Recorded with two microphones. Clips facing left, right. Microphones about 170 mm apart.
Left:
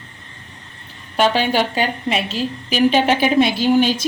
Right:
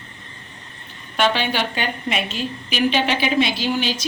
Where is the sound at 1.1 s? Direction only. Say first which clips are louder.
Left 4 dB; 40° left (ahead or behind).